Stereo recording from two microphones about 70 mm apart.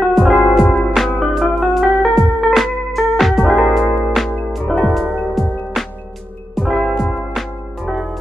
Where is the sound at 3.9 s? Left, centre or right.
Left.